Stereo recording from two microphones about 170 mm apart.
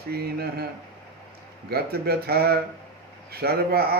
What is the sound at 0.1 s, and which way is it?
Mantra, 70° right (ahead or behind).